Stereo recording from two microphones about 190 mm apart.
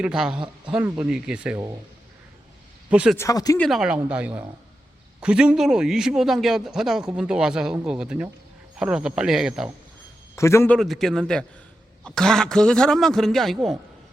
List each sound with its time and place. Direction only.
0.0 s a man's voice: 5° right (ahead or behind)
2.9 s a man's voice: 5° right (ahead or behind)
3.2 s speech: 20° left (ahead or behind)
3.6 s a man's voice: centre (ahead or behind)
10.3 s speech: 15° left (ahead or behind)
10.8 s a man's voice: centre (ahead or behind)